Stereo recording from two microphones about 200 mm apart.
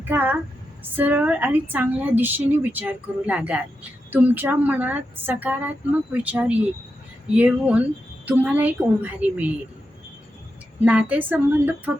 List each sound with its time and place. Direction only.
0.0 s a woman's voice: 10° right (ahead or behind)
10.8 s a woman's voice: 5° right (ahead or behind)